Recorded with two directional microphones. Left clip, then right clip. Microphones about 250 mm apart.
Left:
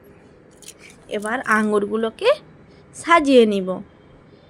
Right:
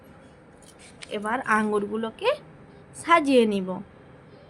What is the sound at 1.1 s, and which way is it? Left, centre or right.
A woman's voice, centre.